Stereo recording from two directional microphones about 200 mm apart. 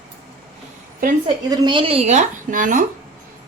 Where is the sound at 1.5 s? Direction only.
25° right (ahead or behind); by 2.8 s 40° right (ahead or behind).